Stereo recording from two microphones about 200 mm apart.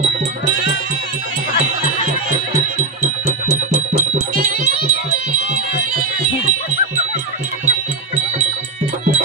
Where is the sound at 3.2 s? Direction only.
35° right (ahead or behind).